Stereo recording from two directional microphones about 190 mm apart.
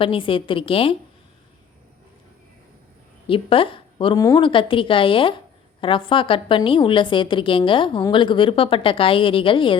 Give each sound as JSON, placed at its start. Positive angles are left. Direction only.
{"t": 0.0, "sound": "a woman's voice", "side_deg": 30}
{"t": 3.2, "sound": "a woman's voice", "side_deg": 30}